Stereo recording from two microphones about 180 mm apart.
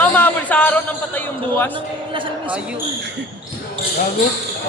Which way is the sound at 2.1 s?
30° right (ahead or behind).